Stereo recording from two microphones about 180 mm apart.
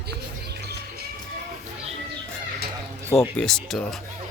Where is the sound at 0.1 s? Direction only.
65° right (ahead or behind).